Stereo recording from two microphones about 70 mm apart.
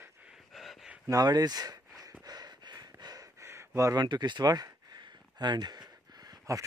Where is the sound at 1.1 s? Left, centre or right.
Right.